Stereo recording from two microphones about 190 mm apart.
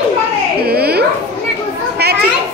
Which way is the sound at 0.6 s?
55° right (ahead or behind).